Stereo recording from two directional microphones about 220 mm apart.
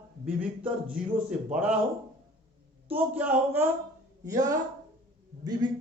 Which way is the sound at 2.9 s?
10° right (ahead or behind).